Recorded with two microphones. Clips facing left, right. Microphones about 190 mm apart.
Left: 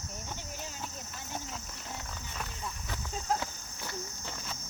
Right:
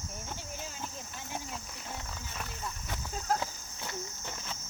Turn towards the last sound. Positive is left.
turn(degrees=-20)  # may be behind; listen again after turning